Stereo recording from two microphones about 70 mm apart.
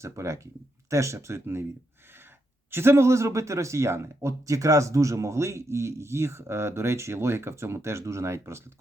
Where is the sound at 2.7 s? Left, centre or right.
Right.